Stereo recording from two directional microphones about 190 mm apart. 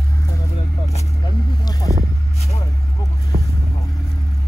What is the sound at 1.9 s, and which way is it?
Vehicle, 45° right (ahead or behind).